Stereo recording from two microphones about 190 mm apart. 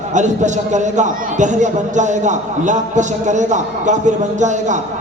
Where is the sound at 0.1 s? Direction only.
40° right (ahead or behind).